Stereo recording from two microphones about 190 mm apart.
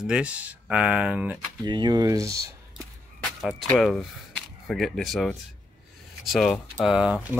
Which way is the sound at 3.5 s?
5° left (ahead or behind).